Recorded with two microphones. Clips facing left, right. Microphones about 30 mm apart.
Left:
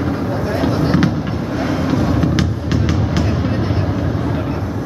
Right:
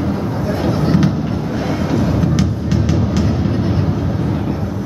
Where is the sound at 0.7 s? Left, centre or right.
Centre.